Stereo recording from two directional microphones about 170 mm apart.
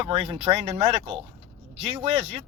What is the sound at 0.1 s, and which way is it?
Speech, 35° right (ahead or behind).